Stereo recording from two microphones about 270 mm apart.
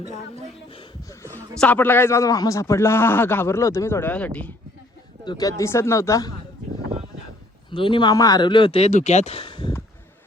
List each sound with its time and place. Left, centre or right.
0.7 s a sound: centre
1.4 s a man's voice: centre
7.7 s a man's voice: centre